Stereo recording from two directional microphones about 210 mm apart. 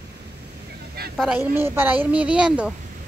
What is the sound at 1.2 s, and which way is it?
A woman's voice, 5° right (ahead or behind).